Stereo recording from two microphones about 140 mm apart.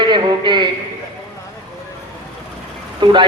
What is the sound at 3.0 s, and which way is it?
Speech, 35° right (ahead or behind).